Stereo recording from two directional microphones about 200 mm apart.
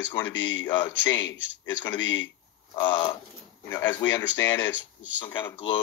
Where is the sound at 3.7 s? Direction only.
10° left (ahead or behind).